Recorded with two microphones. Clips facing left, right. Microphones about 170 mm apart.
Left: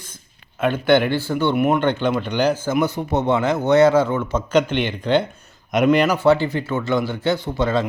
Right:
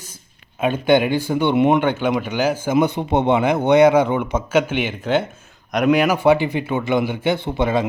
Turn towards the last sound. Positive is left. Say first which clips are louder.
# right 1 dB
turn(degrees=-15)  # may be behind; listen again after turning